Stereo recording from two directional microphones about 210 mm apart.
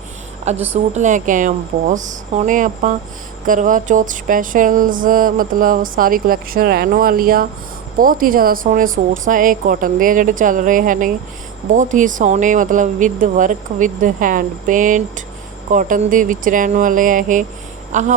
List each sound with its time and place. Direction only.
0.7 s speech: 35° right (ahead or behind)